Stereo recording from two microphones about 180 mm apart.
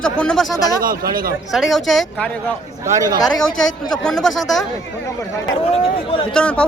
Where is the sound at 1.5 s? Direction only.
Centre (ahead or behind).